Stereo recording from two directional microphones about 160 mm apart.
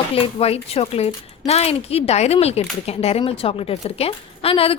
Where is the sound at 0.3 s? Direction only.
40° left (ahead or behind).